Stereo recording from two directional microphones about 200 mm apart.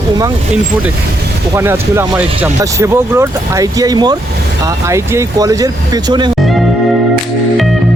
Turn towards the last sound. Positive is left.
turn(degrees=-20)  # may be behind; listen again after turning